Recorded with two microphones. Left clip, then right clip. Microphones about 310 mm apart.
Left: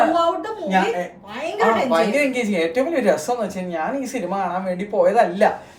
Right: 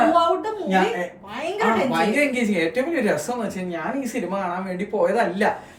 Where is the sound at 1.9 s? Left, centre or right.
Centre.